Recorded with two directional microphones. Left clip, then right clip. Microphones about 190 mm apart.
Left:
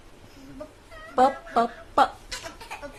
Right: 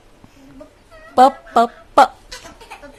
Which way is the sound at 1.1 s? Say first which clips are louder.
Right 9 dB; 60° right (ahead or behind).